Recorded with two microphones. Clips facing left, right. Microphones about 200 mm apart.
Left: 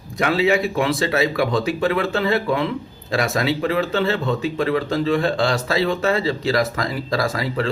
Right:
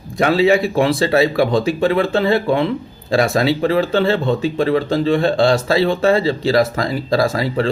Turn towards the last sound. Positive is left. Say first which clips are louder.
# right 5 dB
turn(degrees=-30)  # may be behind; listen again after turning